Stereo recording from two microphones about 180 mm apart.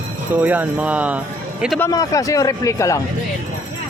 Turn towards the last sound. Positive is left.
turn(degrees=15)  # may be behind; listen again after turning